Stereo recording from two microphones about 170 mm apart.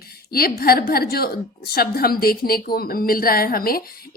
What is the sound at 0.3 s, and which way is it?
A woman's voice, 65° left (ahead or behind).